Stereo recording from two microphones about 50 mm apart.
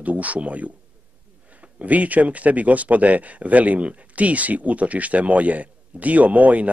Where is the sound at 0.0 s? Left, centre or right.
Right.